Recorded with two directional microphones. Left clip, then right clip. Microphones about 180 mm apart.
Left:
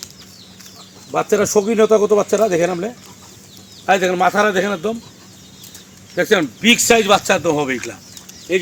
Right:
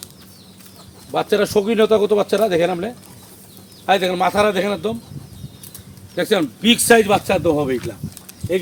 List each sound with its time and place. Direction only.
1.1 s speech: 30° left (ahead or behind)
6.1 s speech: 30° left (ahead or behind); by 7.9 s 10° left (ahead or behind)